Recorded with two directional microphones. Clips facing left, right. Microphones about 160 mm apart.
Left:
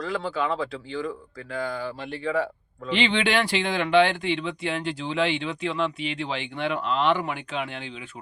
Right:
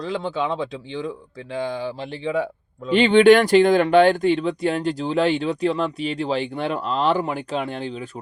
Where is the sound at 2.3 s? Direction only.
15° right (ahead or behind).